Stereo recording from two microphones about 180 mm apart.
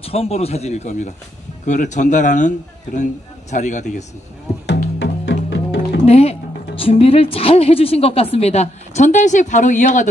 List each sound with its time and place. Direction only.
0.0 s a man's voice: 35° left (ahead or behind)
4.9 s music: 85° left
6.0 s speech: 35° left (ahead or behind)